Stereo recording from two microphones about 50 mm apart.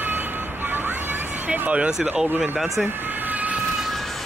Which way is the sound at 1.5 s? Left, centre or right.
Right.